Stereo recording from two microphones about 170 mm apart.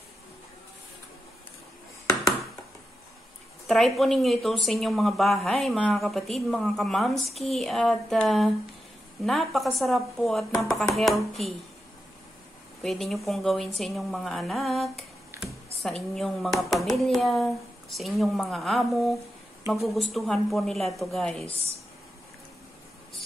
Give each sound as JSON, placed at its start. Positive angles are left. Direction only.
{"t": 3.6, "sound": "a woman's voice", "side_deg": 0}
{"t": 12.8, "sound": "a woman's voice", "side_deg": 0}